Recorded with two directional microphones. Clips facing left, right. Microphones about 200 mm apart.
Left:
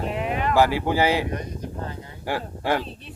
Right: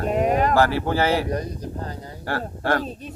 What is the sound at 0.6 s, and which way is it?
Speech, 15° left (ahead or behind).